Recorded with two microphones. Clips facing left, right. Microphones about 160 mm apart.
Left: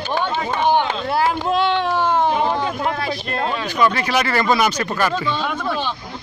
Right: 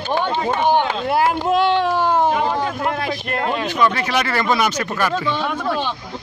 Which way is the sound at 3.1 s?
50° right (ahead or behind).